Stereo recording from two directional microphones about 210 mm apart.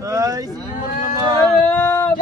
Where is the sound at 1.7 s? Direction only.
10° left (ahead or behind).